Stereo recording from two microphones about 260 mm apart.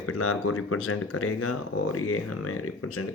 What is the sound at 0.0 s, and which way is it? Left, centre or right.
Speech, left.